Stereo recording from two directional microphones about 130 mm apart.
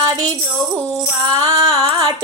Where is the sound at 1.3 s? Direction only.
30° right (ahead or behind).